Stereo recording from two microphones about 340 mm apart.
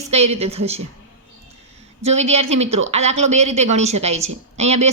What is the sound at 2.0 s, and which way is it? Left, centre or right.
Speech, centre.